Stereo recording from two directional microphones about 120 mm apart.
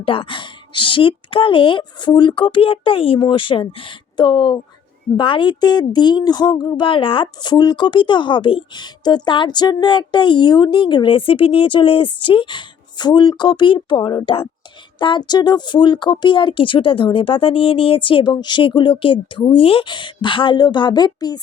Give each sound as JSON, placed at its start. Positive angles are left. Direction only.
{"t": 0.0, "sound": "a woman's voice", "side_deg": 50}